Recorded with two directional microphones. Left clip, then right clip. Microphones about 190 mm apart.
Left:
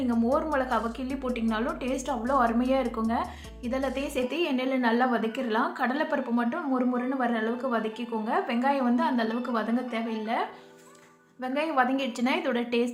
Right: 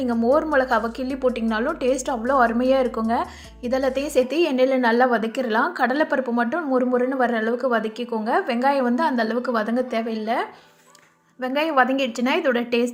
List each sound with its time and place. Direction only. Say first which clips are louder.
0.3 s a woman's voice: right 7 dB; 35° right (ahead or behind)
11.4 s a woman's voice: right 6 dB; 35° right (ahead or behind)